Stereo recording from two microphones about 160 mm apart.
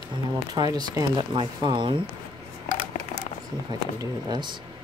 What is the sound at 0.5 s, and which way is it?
Speech, 25° right (ahead or behind).